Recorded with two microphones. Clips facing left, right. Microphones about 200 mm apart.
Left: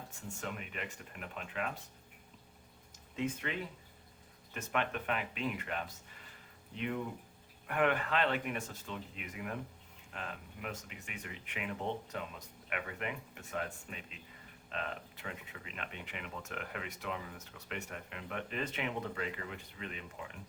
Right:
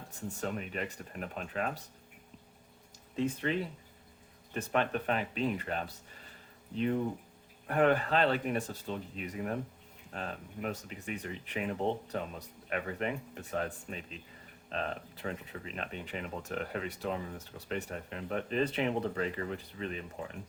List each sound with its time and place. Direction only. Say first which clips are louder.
0.2 s speech: right 7 dB; 35° right (ahead or behind)
3.2 s speech: right 5 dB; 35° right (ahead or behind)